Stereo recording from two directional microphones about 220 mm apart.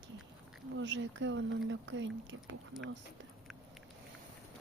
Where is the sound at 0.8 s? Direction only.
55° right (ahead or behind).